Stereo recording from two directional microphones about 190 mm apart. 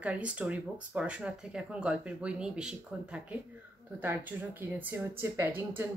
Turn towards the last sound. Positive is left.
turn(degrees=-10)  # may be behind; listen again after turning